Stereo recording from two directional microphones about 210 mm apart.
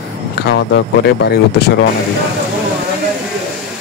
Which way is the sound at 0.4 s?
50° left (ahead or behind).